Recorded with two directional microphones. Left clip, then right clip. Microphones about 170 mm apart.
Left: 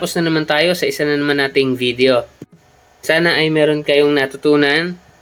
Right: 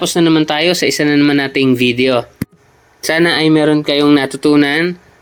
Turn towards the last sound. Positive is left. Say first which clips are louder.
# right 2 dB
turn(degrees=-35)  # may be behind; listen again after turning